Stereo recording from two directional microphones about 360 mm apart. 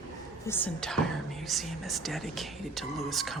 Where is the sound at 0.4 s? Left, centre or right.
Centre.